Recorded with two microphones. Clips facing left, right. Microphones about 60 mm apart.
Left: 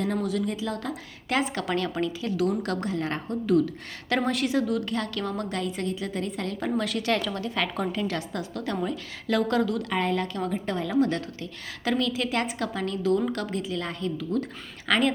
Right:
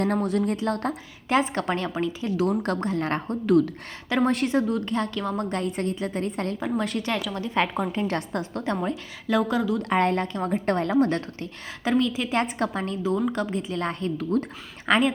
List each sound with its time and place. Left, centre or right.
0.0 s speech: right
1.3 s a woman's voice: right
5.5 s a woman's voice: right
9.2 s speech: centre
9.8 s speech: right
10.5 s a woman's voice: right
10.9 s a woman's voice: right
11.9 s a woman's voice: right
13.4 s a woman's voice: right
14.8 s a woman's voice: right